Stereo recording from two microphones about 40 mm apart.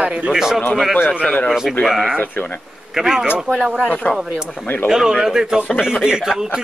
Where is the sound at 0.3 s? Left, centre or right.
Centre.